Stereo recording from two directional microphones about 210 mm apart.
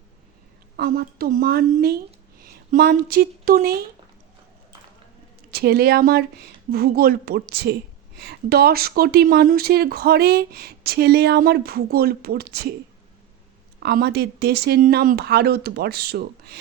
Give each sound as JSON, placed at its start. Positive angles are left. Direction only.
{"t": 0.8, "sound": "speech", "side_deg": -45}
{"t": 5.5, "sound": "speech", "side_deg": -50}
{"t": 13.7, "sound": "speech", "side_deg": -50}